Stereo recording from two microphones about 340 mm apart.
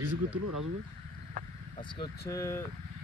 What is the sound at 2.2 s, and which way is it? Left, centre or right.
Speech, centre.